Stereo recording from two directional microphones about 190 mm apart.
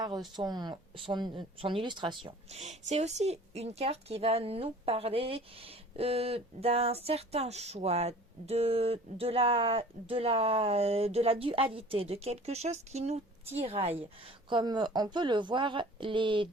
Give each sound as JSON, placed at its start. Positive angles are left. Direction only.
{"t": 0.3, "sound": "speech", "side_deg": -20}